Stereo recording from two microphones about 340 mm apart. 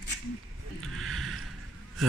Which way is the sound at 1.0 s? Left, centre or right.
Centre.